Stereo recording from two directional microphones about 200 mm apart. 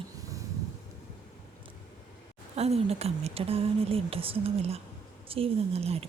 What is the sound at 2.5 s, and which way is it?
A woman's voice, 30° right (ahead or behind).